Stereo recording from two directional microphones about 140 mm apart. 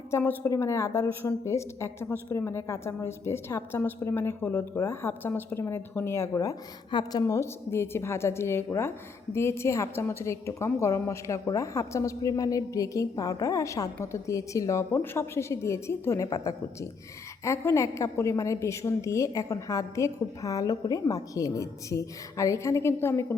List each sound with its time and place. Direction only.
0.1 s a woman's voice: 15° left (ahead or behind)